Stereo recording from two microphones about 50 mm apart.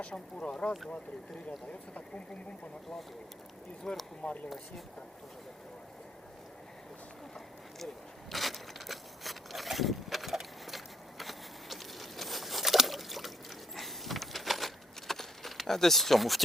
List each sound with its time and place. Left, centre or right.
0.4 s speech: centre
3.9 s speech: centre
4.2 s speech: left
8.3 s a sound: centre